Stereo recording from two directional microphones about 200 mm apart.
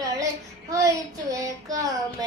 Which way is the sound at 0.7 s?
15° right (ahead or behind).